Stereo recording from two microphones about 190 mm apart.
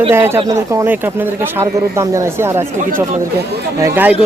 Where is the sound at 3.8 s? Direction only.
15° right (ahead or behind).